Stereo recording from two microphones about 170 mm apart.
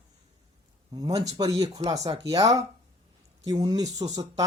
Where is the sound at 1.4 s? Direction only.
20° right (ahead or behind).